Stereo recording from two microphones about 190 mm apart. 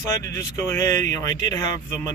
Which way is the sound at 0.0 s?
15° left (ahead or behind).